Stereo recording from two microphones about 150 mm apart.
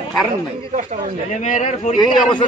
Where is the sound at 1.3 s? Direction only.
55° left (ahead or behind).